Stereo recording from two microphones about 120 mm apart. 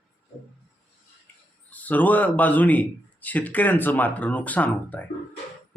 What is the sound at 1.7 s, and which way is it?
Speech, 15° left (ahead or behind).